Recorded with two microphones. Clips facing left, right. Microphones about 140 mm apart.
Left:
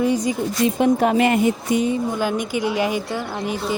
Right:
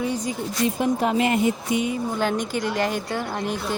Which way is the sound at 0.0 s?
75° left (ahead or behind).